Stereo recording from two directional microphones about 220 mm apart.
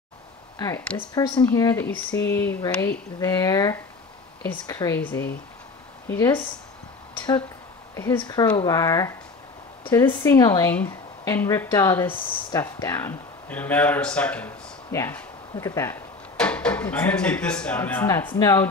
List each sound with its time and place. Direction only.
0.6 s speech: 10° left (ahead or behind)
1.2 s speech: 20° left (ahead or behind)
7.9 s speech: 10° left (ahead or behind)